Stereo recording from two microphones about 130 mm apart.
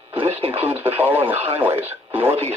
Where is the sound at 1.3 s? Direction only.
50° right (ahead or behind).